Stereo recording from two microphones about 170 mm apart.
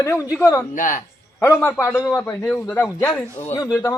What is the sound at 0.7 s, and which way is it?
Speech, 50° left (ahead or behind).